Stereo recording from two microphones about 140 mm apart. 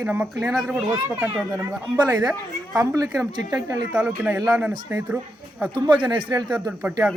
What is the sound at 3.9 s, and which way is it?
Speech, 10° right (ahead or behind).